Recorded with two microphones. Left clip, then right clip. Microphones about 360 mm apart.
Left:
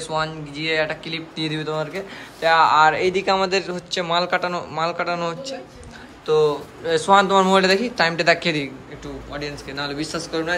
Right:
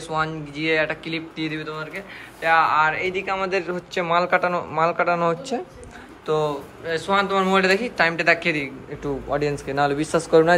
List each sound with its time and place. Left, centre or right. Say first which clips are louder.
0.1 s speech: right 1 dB; centre
9.0 s speech: right 7 dB; centre